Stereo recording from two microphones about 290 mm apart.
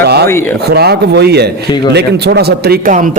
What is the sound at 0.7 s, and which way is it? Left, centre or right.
A man's voice, right.